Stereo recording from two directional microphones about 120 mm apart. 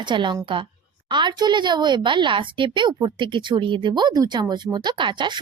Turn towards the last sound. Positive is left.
turn(degrees=-40)  # may be behind; listen again after turning